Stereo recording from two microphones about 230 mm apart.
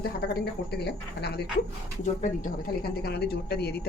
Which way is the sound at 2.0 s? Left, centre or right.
Left.